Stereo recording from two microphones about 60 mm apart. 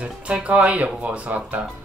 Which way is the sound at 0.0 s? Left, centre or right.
Centre.